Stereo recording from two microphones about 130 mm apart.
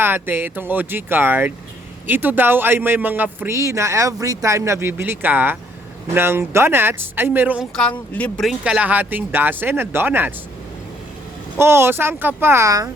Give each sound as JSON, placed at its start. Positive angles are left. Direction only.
{"t": 0.0, "sound": "speech", "side_deg": -15}
{"t": 7.8, "sound": "speech", "side_deg": 10}
{"t": 8.4, "sound": "speech", "side_deg": -5}
{"t": 11.5, "sound": "speech", "side_deg": -20}